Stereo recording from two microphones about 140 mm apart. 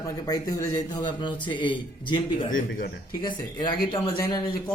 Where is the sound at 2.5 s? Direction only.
75° left (ahead or behind).